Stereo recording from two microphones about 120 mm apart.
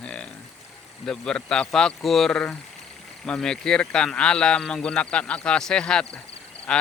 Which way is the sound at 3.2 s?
5° left (ahead or behind).